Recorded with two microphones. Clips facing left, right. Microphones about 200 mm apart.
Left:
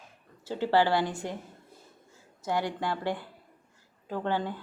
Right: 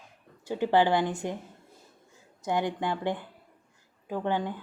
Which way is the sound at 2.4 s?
20° right (ahead or behind).